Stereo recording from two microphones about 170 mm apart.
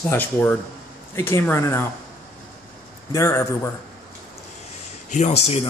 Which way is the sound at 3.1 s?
15° left (ahead or behind).